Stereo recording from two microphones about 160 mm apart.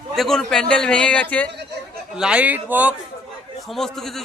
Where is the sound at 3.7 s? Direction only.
Centre (ahead or behind).